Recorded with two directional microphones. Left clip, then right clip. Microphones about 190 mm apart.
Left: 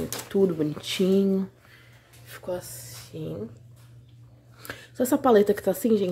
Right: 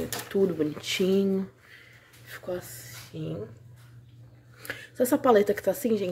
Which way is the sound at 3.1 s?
15° left (ahead or behind).